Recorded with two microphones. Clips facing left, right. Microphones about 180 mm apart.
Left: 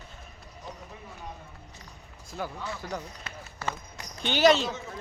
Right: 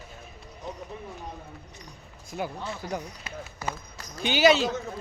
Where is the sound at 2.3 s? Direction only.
15° right (ahead or behind).